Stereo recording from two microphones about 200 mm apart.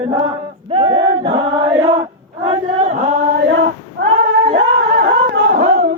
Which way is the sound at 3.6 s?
65° right (ahead or behind).